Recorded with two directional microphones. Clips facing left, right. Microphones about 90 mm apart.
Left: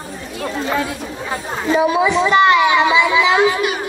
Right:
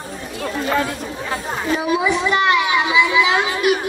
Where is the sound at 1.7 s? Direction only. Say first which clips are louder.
Left 4 dB; 25° left (ahead or behind).